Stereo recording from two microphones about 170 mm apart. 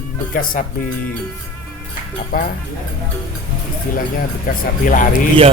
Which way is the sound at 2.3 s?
60° left (ahead or behind).